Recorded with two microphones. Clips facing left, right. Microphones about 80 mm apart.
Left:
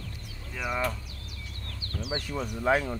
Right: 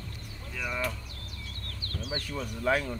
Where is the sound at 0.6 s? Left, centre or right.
Centre.